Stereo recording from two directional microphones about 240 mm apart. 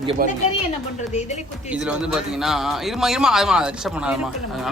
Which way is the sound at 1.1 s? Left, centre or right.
Left.